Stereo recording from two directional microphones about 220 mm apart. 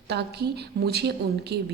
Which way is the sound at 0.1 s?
50° right (ahead or behind).